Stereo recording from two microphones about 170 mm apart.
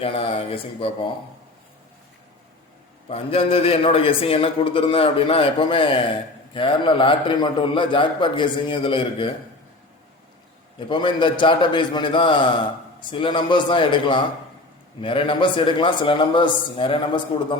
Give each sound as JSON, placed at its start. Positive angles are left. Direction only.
{"t": 0.0, "sound": "a man's voice", "side_deg": 35}
{"t": 3.1, "sound": "a man's voice", "side_deg": 35}
{"t": 10.8, "sound": "a man's voice", "side_deg": 30}